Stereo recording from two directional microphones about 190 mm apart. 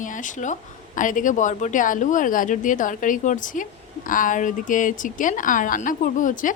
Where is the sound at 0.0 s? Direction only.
40° left (ahead or behind).